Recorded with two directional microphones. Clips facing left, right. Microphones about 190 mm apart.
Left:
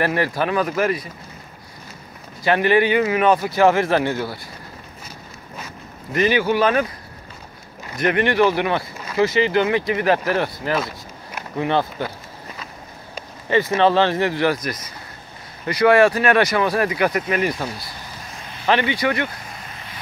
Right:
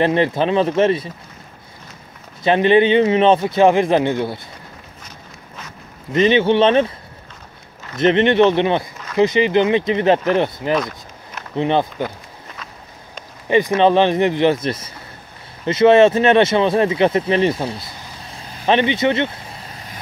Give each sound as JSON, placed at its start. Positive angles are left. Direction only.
{"t": 0.0, "sound": "speech", "side_deg": -20}
{"t": 2.4, "sound": "speech", "side_deg": -20}
{"t": 6.1, "sound": "speech", "side_deg": -25}
{"t": 8.0, "sound": "speech", "side_deg": -25}
{"t": 10.8, "sound": "a sound", "side_deg": 5}
{"t": 11.5, "sound": "speech", "side_deg": -20}
{"t": 13.5, "sound": "speech", "side_deg": -15}